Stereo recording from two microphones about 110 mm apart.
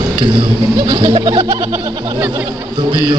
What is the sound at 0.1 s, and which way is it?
A man's voice, 45° right (ahead or behind).